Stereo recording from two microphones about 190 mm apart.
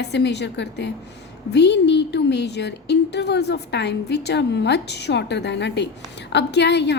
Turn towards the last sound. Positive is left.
turn(degrees=65)  # may be behind; listen again after turning